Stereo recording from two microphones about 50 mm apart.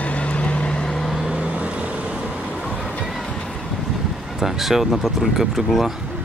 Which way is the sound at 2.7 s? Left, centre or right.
Centre.